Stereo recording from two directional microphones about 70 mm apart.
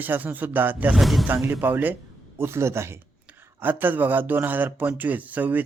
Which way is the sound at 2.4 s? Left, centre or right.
Right.